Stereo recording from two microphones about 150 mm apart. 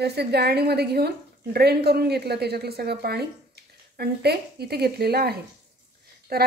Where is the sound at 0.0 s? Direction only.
90° right.